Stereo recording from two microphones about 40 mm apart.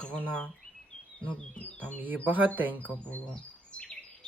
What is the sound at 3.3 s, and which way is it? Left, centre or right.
Chirp, left.